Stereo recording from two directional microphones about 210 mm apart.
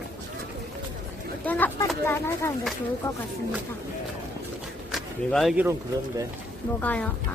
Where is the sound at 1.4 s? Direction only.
10° left (ahead or behind).